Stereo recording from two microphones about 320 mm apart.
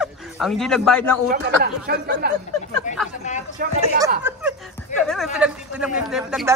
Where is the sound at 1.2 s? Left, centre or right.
Right.